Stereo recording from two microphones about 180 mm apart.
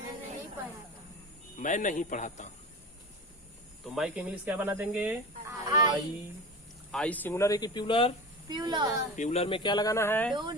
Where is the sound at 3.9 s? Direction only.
5° right (ahead or behind).